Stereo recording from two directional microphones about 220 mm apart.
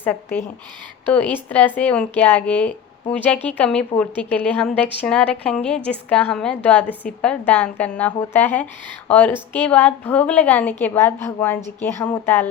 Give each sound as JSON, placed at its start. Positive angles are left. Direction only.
{"t": 0.0, "sound": "a woman's voice", "side_deg": 10}